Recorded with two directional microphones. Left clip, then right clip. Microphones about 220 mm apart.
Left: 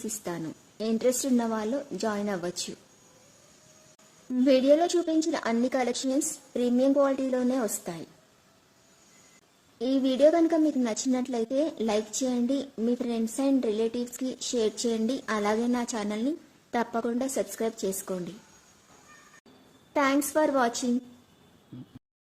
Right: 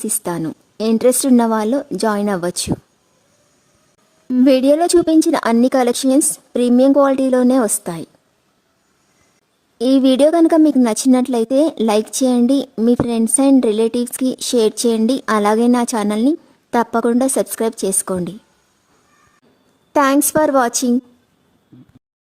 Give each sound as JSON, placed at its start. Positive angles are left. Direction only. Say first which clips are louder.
{"t": 0.2, "sound": "a woman's voice", "louder": "right 13 dB", "side_deg": -50}
{"t": 4.3, "sound": "a woman's voice", "louder": "right 9 dB", "side_deg": -50}
{"t": 9.7, "sound": "a woman's voice", "louder": "right 13 dB", "side_deg": -50}
{"t": 19.9, "sound": "a woman's voice", "louder": "right 11 dB", "side_deg": -50}